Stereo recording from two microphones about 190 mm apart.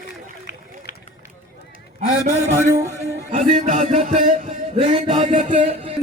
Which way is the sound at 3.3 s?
40° right (ahead or behind).